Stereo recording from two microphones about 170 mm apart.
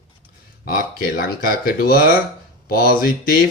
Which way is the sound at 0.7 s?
60° left (ahead or behind).